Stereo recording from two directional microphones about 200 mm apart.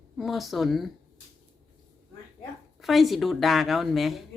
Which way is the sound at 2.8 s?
Centre (ahead or behind).